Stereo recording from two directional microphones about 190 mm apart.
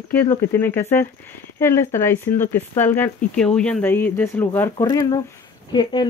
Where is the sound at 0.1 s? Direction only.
15° left (ahead or behind).